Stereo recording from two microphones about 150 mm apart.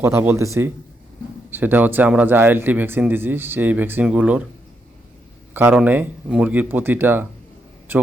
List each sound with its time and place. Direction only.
0.0 s speech: 15° right (ahead or behind)
5.5 s speech: 10° right (ahead or behind)